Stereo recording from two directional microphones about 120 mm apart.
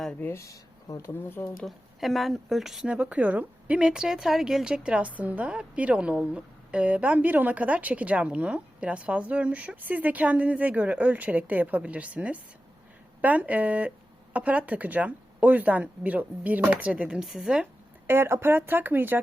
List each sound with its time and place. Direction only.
0.0 s speech: 5° left (ahead or behind)
0.3 s speech: 25° left (ahead or behind)
1.6 s speech: centre (ahead or behind)
18.0 s speech: 20° right (ahead or behind)